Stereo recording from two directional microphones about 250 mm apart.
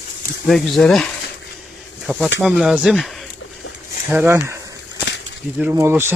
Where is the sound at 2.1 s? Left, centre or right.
Centre.